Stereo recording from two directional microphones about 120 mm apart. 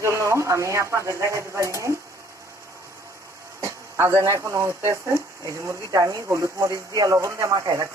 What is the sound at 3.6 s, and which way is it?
Speech, 25° right (ahead or behind).